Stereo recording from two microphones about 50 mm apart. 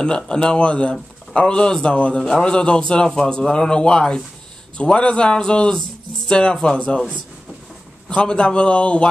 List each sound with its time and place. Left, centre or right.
0.0 s a man's voice: centre
8.1 s a man's voice: centre